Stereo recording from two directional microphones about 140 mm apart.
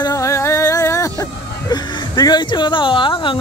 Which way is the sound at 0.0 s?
25° left (ahead or behind).